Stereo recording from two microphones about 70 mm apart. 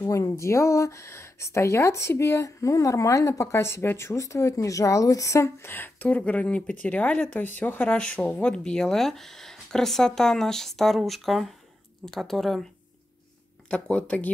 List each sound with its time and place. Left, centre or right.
0.0 s speech: left; by 12.6 s centre
13.7 s speech: centre